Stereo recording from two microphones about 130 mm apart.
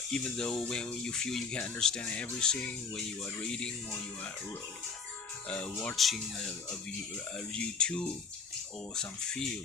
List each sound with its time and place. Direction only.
0.1 s speech: 5° left (ahead or behind)
5.5 s speech: 10° left (ahead or behind)